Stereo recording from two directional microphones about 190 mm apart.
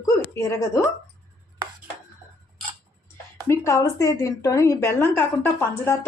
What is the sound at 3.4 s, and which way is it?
A woman's voice, 15° left (ahead or behind).